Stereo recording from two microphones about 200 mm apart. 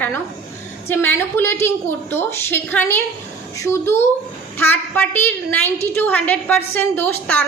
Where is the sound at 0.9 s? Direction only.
10° left (ahead or behind).